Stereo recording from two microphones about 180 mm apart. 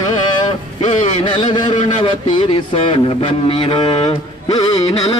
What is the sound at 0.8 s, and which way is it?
A man's voice, 30° left (ahead or behind).